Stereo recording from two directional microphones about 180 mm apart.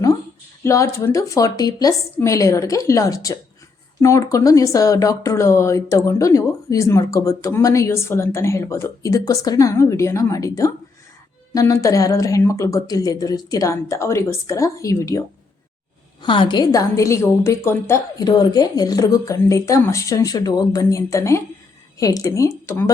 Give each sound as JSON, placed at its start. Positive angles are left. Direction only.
{"t": 0.6, "sound": "speech", "side_deg": 15}
{"t": 16.2, "sound": "a woman's voice", "side_deg": 25}